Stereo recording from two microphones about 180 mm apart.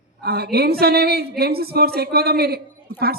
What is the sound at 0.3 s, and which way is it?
A woman's voice, 60° right (ahead or behind).